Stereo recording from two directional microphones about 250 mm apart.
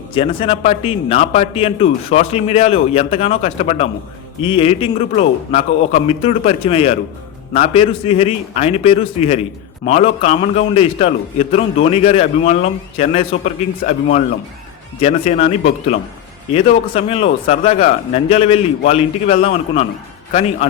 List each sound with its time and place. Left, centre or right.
0.1 s a man's voice: left